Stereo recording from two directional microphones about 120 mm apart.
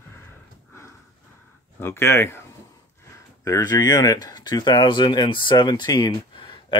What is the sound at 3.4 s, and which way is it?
Speech, 30° left (ahead or behind).